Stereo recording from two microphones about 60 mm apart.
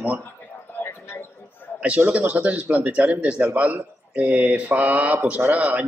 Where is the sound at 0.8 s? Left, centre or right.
Left.